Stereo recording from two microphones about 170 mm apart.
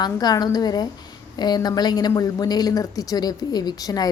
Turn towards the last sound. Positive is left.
turn(degrees=20)  # may be behind; listen again after turning